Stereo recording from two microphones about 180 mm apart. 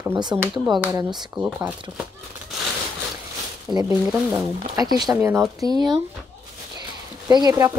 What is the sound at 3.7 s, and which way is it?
Speech, 15° right (ahead or behind).